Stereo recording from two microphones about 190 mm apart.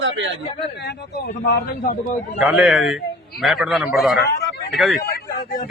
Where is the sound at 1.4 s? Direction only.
50° left (ahead or behind).